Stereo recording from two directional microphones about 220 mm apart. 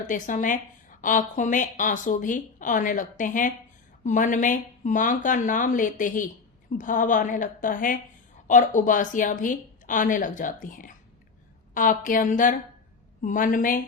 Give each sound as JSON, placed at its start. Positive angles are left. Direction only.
{"t": 0.1, "sound": "a woman's voice", "side_deg": 35}